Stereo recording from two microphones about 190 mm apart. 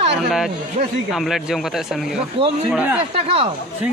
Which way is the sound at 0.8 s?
40° right (ahead or behind).